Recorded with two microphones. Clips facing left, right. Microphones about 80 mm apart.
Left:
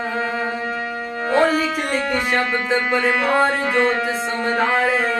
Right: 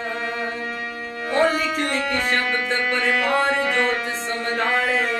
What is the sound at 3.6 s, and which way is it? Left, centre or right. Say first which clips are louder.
Music: left 3 dB; left.